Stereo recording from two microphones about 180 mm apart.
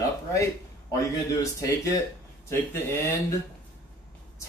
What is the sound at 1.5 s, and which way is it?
Speech, 15° left (ahead or behind).